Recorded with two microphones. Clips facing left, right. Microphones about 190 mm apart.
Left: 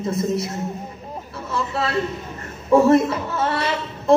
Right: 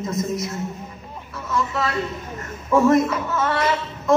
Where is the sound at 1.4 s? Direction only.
30° left (ahead or behind).